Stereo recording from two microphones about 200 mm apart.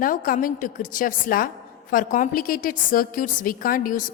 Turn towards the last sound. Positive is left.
turn(degrees=45)  # may be behind; listen again after turning